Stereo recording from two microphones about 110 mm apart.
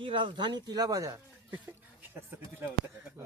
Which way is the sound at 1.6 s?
15° right (ahead or behind).